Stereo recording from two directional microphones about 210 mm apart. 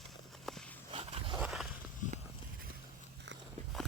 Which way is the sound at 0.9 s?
30° right (ahead or behind).